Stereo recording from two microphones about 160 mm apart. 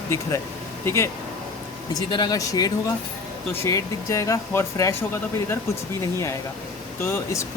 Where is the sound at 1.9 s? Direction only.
25° left (ahead or behind).